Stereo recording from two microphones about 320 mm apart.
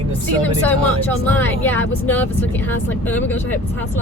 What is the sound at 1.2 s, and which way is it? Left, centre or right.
Speech, centre.